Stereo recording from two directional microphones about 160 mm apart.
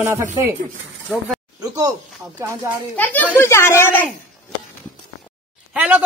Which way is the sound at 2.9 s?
10° left (ahead or behind).